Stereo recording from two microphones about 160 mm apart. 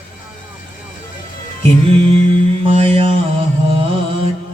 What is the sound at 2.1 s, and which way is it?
Mantra, 35° right (ahead or behind).